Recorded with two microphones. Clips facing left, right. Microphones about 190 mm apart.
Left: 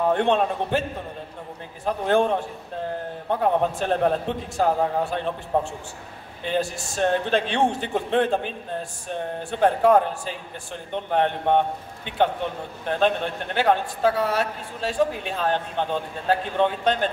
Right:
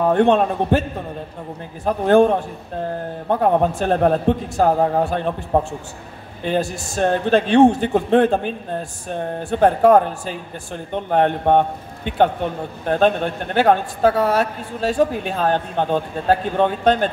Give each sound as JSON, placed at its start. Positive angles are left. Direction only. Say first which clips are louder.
{"t": 0.1, "sound": "a woman's voice", "louder": "right 5 dB", "side_deg": -45}
{"t": 1.9, "sound": "a woman's voice", "louder": "right 7 dB", "side_deg": -45}
{"t": 9.5, "sound": "a woman's voice", "louder": "right 5 dB", "side_deg": -45}